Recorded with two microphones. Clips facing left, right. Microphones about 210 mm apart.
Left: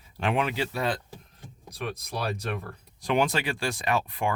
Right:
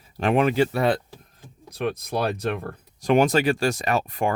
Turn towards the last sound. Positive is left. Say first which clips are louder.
# right 4 dB
turn(degrees=-45)  # may be behind; listen again after turning